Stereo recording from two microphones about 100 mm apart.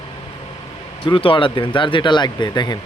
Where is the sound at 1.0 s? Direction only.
60° left (ahead or behind); by 2.8 s 45° left (ahead or behind).